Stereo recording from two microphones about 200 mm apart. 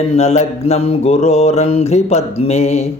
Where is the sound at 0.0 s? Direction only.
30° left (ahead or behind).